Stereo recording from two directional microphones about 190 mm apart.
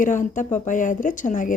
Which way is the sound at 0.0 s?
40° left (ahead or behind).